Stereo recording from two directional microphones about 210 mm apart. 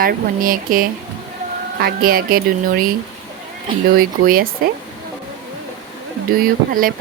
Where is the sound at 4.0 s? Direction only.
45° right (ahead or behind).